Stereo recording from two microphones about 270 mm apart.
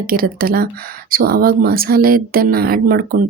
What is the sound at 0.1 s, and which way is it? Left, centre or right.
Speech, right.